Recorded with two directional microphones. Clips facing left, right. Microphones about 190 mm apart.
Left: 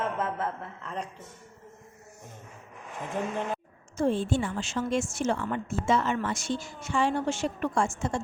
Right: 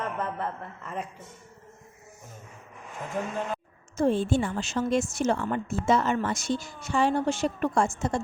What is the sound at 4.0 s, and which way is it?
A woman's voice, 40° right (ahead or behind).